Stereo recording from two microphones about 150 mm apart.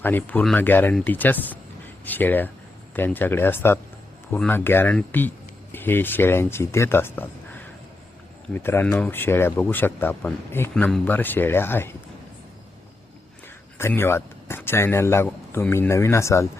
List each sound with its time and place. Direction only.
0.0 s speech: 10° left (ahead or behind)
13.7 s speech: 15° left (ahead or behind)